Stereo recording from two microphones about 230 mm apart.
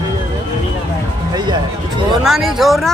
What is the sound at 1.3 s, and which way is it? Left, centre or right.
Music, centre.